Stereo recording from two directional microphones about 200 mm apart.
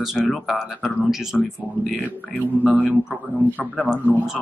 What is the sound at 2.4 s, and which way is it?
Speech, 5° right (ahead or behind).